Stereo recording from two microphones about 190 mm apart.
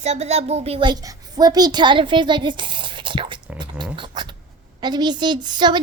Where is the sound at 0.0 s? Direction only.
35° right (ahead or behind).